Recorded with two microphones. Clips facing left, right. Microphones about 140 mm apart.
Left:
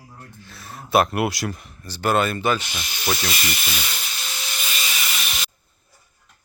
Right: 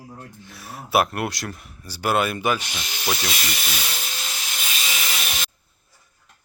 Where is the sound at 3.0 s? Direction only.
Centre (ahead or behind).